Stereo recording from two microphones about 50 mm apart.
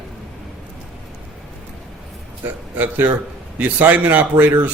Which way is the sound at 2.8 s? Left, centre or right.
Right.